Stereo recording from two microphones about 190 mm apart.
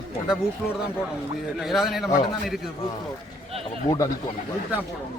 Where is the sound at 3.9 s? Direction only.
35° left (ahead or behind).